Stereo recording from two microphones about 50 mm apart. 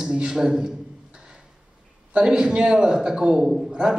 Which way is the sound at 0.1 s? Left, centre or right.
Right.